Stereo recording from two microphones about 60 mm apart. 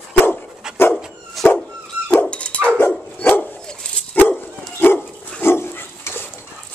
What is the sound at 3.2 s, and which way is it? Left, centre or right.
Dog, left.